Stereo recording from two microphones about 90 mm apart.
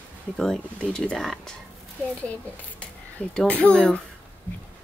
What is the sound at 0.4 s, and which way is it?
Speech, 5° left (ahead or behind).